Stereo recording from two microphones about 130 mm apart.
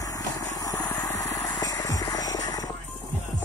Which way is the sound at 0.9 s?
25° left (ahead or behind).